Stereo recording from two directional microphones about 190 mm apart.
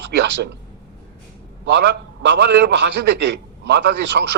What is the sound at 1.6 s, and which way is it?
A man's voice, 65° right (ahead or behind).